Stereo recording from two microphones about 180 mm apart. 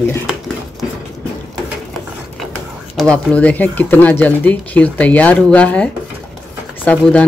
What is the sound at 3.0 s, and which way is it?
Speech, 5° left (ahead or behind).